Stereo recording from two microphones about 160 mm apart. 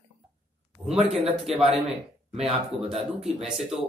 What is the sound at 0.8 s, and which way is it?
Speech, 40° right (ahead or behind).